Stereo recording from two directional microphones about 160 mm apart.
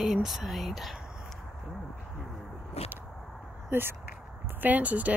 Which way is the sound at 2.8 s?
40° left (ahead or behind).